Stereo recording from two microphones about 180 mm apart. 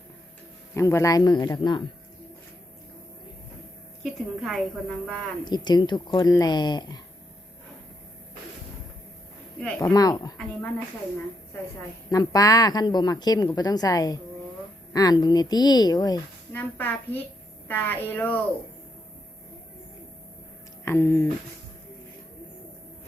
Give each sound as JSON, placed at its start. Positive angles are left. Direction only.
{"t": 0.7, "sound": "speech", "side_deg": 15}
{"t": 4.0, "sound": "a woman's voice", "side_deg": 0}
{"t": 5.5, "sound": "speech", "side_deg": 25}
{"t": 9.6, "sound": "speech", "side_deg": 5}
{"t": 9.8, "sound": "speech", "side_deg": 20}
{"t": 12.1, "sound": "speech", "side_deg": 20}
{"t": 16.5, "sound": "speech", "side_deg": 10}
{"t": 20.8, "sound": "speech", "side_deg": 15}